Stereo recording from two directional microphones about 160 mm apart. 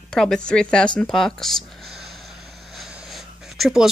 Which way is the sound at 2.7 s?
Centre (ahead or behind).